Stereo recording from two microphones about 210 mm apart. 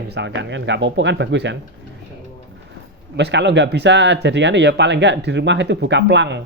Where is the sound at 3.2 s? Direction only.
55° right (ahead or behind).